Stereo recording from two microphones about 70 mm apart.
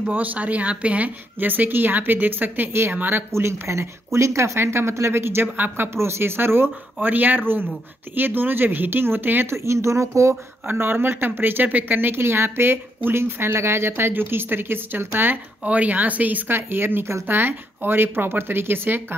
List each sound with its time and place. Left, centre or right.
0.1 s speech: right
10.7 s speech: right